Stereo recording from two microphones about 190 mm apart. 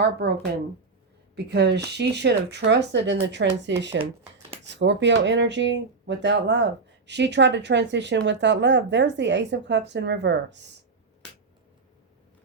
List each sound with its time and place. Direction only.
0.0 s speech: 60° right (ahead or behind)
1.4 s speech: 65° right (ahead or behind)